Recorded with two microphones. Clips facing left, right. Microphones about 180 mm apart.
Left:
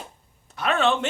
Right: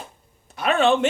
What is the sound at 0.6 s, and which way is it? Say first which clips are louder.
Speech: right 4 dB; 10° right (ahead or behind).